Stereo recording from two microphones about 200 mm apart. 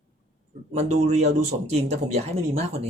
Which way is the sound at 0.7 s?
35° right (ahead or behind).